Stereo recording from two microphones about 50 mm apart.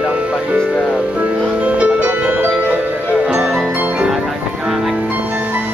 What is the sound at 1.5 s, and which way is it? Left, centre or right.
Music, right.